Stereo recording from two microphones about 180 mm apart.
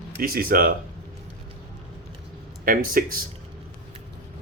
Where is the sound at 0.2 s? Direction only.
55° right (ahead or behind).